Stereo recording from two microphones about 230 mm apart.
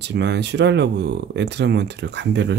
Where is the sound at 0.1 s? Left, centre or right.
Right.